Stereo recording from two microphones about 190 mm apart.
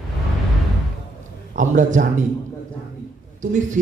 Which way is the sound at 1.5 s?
40° right (ahead or behind).